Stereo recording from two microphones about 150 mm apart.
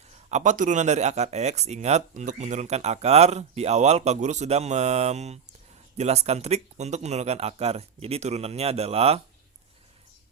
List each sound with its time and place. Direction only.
0.3 s speech: 50° right (ahead or behind)